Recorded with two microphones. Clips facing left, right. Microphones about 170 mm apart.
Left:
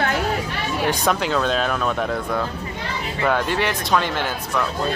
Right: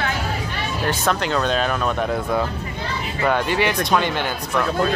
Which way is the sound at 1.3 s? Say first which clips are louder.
Even; centre (ahead or behind).